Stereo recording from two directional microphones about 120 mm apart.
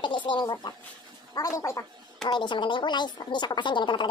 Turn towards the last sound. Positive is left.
turn(degrees=40)  # may be behind; listen again after turning